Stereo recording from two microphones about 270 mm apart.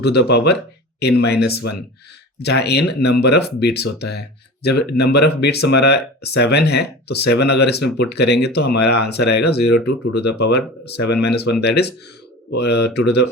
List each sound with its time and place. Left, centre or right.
0.0 s speech: left